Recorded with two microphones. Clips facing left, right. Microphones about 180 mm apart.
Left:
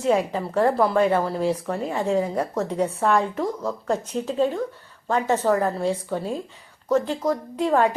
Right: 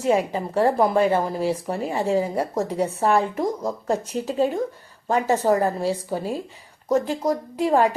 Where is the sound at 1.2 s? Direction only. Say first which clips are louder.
Even; 5° right (ahead or behind).